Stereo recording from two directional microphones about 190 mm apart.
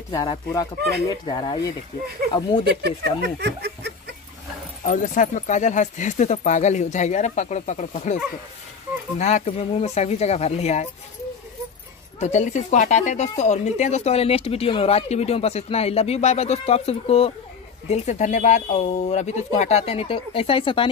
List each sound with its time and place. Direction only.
0.1 s speech: 20° left (ahead or behind)
2.8 s speech: 60° right (ahead or behind)
3.3 s snicker: 60° right (ahead or behind)
4.8 s speech: 40° left (ahead or behind)
9.2 s speech: 35° left (ahead or behind)
12.2 s speech: 40° left (ahead or behind)